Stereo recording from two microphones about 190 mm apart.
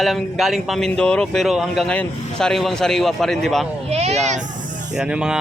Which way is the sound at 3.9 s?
35° right (ahead or behind).